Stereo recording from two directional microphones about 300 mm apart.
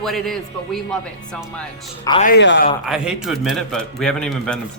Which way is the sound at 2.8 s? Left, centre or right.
Centre.